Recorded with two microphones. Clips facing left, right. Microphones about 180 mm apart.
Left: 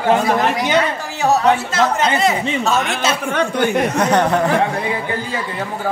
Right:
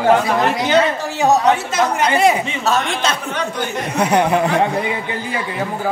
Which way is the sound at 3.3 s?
55° left (ahead or behind).